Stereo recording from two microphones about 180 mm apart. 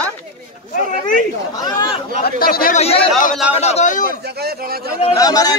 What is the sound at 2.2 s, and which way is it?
Speech, 55° left (ahead or behind).